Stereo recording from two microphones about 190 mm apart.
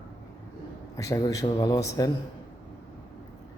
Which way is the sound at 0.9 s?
15° left (ahead or behind).